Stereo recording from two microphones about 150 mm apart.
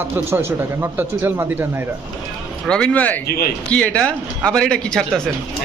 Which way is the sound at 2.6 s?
5° left (ahead or behind).